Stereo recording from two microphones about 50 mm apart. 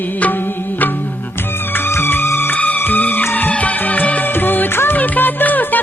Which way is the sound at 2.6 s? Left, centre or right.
Left.